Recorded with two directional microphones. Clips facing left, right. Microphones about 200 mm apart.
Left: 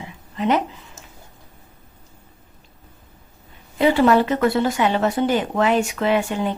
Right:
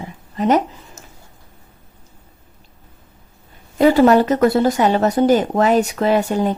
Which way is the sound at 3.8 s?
40° right (ahead or behind).